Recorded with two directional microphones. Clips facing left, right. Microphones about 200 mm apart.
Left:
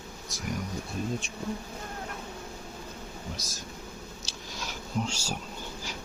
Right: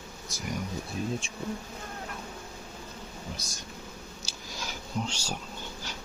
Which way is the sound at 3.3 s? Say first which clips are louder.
Left 1 dB; centre (ahead or behind).